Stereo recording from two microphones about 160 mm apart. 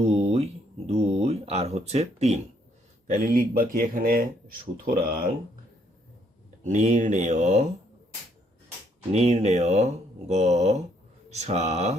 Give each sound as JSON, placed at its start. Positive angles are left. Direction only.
{"t": 0.0, "sound": "a sound", "side_deg": -40}
{"t": 3.1, "sound": "speech", "side_deg": -60}
{"t": 6.7, "sound": "speech", "side_deg": -45}
{"t": 9.1, "sound": "speech", "side_deg": -45}